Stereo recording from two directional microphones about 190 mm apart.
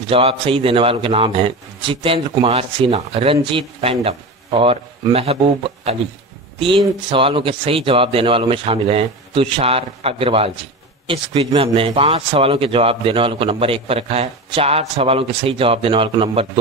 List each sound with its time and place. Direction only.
0.1 s speech: 30° right (ahead or behind)
7.1 s speech: 30° right (ahead or behind)